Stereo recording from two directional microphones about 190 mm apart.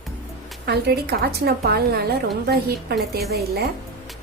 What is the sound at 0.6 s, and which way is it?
A woman's voice, 55° right (ahead or behind).